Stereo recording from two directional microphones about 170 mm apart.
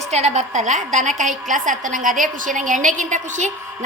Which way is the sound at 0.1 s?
40° right (ahead or behind).